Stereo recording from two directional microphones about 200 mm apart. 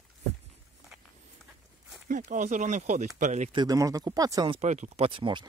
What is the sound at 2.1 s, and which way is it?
Speech, 40° right (ahead or behind).